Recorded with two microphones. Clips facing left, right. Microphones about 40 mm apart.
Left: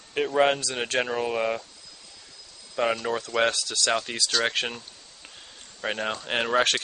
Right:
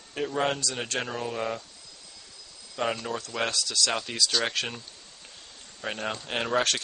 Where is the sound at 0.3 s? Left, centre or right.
Left.